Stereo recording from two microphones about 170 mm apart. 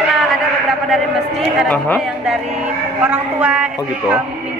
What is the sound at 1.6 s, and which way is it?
Speech, 5° left (ahead or behind).